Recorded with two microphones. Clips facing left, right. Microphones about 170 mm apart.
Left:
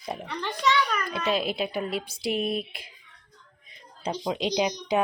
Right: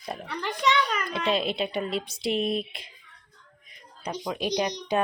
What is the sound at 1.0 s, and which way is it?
Speech, centre (ahead or behind).